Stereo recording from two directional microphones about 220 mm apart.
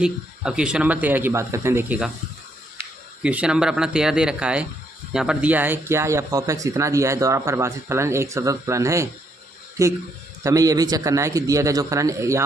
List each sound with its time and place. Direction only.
0.0 s speech: 5° right (ahead or behind)
3.2 s speech: 5° right (ahead or behind)